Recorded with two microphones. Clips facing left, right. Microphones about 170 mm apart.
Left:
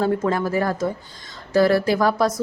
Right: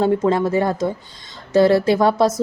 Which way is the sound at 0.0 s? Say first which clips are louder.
Right 4 dB; 25° right (ahead or behind).